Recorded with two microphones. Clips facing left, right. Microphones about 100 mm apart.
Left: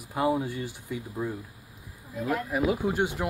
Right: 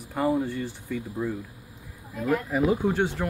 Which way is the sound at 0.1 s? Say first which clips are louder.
Right 1 dB; 5° left (ahead or behind).